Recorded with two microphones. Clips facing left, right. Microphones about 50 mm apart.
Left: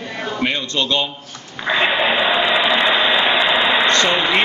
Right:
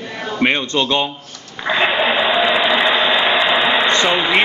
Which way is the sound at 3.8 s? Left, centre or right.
Centre.